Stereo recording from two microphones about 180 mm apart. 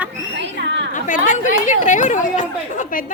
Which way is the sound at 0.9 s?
45° left (ahead or behind).